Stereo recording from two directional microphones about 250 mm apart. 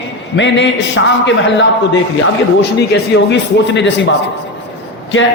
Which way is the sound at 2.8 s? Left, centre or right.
Left.